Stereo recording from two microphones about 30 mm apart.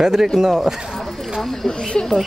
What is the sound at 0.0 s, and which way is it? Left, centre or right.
Speech, centre.